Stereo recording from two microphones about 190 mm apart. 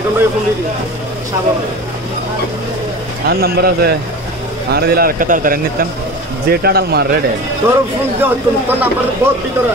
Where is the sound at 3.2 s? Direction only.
55° right (ahead or behind).